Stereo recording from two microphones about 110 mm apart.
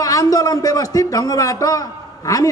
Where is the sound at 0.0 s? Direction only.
35° left (ahead or behind).